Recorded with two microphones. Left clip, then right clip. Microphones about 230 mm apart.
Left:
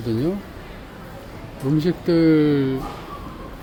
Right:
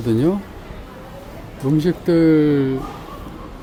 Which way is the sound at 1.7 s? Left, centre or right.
Centre.